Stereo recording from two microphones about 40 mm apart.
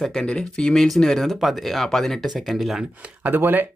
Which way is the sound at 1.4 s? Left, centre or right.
Centre.